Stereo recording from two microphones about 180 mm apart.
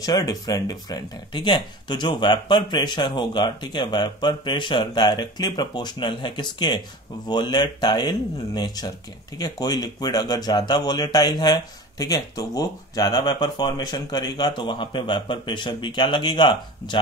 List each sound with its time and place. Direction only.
0.0 s speech: 20° left (ahead or behind)